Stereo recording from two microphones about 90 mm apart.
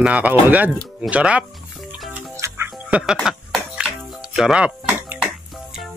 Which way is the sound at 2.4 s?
35° right (ahead or behind).